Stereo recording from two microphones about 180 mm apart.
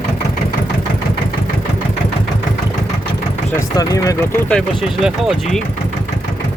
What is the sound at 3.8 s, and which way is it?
Speech, 20° left (ahead or behind).